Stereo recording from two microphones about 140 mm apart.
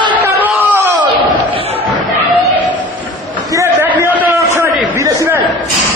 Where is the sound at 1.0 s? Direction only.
40° right (ahead or behind).